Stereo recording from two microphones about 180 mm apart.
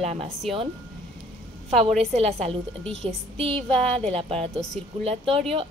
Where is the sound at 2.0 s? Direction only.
35° right (ahead or behind).